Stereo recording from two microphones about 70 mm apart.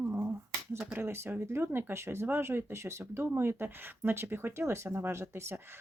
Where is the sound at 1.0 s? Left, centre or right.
Right.